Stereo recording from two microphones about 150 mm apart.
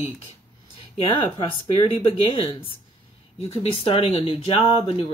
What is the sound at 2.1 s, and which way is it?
Speech, 40° left (ahead or behind).